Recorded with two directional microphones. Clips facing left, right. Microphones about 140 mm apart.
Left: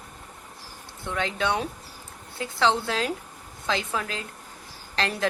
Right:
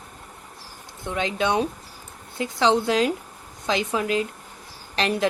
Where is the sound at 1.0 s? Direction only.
15° right (ahead or behind).